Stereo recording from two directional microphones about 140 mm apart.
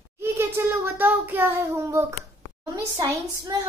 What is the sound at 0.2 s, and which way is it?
A child's voice, 20° right (ahead or behind).